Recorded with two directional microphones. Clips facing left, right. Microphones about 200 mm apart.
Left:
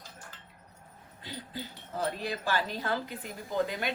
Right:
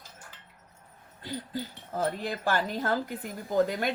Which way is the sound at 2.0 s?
50° right (ahead or behind).